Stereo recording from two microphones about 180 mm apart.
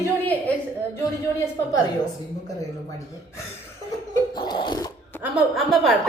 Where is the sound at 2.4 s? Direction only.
20° left (ahead or behind).